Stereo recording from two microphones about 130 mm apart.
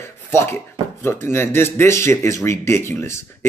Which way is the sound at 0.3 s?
20° left (ahead or behind).